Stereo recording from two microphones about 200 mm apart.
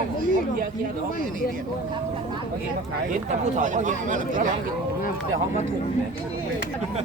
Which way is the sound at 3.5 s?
40° right (ahead or behind).